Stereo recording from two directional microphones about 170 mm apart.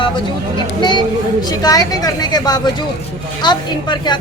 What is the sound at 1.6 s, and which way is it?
A woman's voice, 20° left (ahead or behind).